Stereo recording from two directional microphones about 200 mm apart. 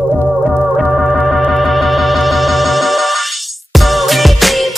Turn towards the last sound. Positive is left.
turn(degrees=0)  # may be behind; listen again after turning